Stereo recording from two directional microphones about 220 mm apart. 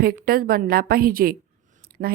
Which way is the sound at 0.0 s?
40° right (ahead or behind).